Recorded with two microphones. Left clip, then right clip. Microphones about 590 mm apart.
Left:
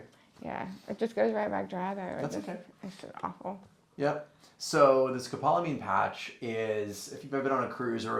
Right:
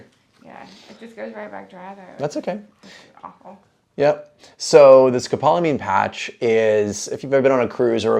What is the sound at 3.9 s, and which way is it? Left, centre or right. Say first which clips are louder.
Speech: right 14 dB; right.